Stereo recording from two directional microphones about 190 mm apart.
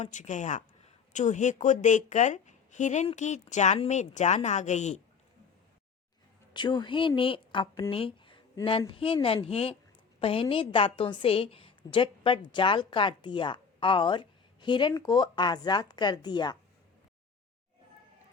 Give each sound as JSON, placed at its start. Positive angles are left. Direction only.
{"t": 0.0, "sound": "a woman's voice", "side_deg": 40}
{"t": 6.5, "sound": "a woman's voice", "side_deg": 25}